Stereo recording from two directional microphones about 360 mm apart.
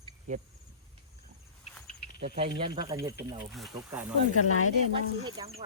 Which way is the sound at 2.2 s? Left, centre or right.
Centre.